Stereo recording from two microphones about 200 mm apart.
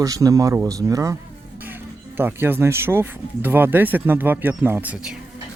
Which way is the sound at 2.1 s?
10° right (ahead or behind).